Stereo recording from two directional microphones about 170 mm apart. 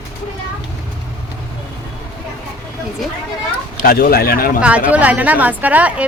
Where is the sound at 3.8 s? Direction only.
60° left (ahead or behind).